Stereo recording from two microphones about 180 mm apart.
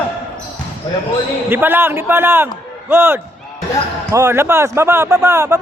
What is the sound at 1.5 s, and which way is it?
A man's voice, 10° right (ahead or behind).